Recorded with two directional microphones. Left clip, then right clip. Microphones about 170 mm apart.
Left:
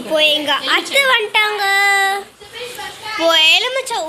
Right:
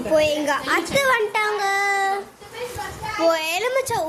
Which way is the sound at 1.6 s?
5° right (ahead or behind).